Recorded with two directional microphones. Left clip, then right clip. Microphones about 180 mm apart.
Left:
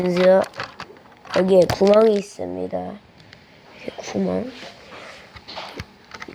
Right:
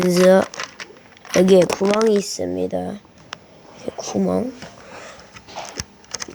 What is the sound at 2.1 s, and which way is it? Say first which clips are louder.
Speech: right 2 dB; 30° right (ahead or behind).